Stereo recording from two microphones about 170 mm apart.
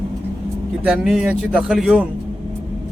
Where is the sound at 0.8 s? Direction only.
5° right (ahead or behind).